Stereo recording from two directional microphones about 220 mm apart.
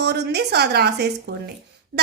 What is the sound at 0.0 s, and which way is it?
A woman's voice, 50° right (ahead or behind).